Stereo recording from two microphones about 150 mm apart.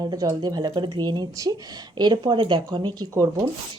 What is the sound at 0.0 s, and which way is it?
A woman's voice, 25° right (ahead or behind).